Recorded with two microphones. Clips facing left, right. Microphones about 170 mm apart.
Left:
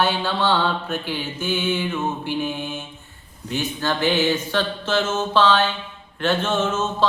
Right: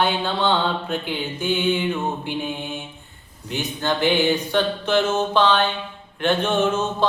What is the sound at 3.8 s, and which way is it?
Mantra, 15° right (ahead or behind).